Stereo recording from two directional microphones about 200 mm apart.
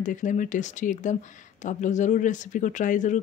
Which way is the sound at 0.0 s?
40° left (ahead or behind).